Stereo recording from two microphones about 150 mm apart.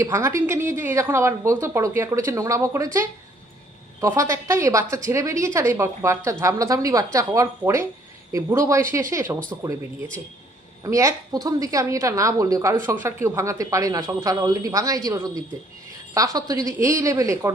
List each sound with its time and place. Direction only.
0.0 s a woman's voice: 20° right (ahead or behind)
4.0 s a woman's voice: 20° right (ahead or behind)
10.8 s a woman's voice: 20° right (ahead or behind)